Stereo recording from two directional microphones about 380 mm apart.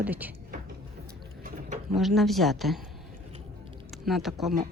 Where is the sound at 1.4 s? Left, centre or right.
Right.